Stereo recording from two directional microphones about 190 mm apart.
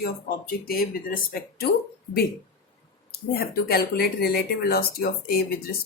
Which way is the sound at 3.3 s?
55° left (ahead or behind).